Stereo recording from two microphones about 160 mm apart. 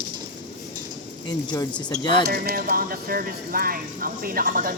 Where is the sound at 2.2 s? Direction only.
75° right (ahead or behind).